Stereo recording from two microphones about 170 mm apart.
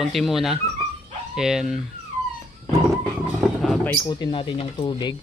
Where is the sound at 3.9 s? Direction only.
25° left (ahead or behind).